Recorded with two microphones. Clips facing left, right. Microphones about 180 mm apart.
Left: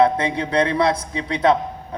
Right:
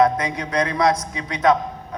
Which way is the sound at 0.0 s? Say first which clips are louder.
Left 1 dB; 30° left (ahead or behind).